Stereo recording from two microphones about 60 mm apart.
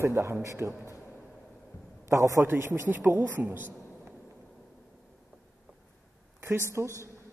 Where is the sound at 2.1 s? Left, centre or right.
Right.